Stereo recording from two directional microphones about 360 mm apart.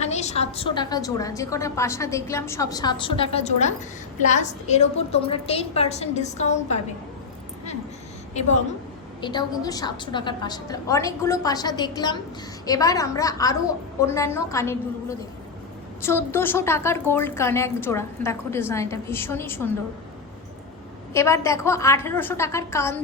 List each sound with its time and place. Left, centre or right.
0.0 s a woman's voice: centre
9.2 s a woman's voice: centre
16.0 s a woman's voice: centre
21.1 s a woman's voice: centre